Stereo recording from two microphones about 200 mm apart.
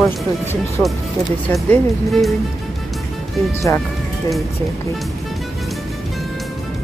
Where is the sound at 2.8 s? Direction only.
Centre (ahead or behind).